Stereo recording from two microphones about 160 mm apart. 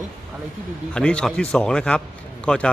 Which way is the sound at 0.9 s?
5° left (ahead or behind).